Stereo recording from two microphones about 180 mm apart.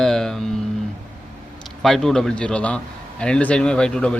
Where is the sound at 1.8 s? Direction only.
Centre (ahead or behind).